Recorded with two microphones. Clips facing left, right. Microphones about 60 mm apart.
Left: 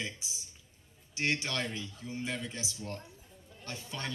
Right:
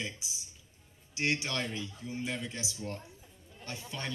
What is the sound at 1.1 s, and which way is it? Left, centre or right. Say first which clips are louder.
Speech: even; centre.